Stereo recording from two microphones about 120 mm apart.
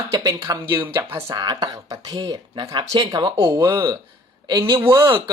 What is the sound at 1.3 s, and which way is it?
Speech, 35° right (ahead or behind).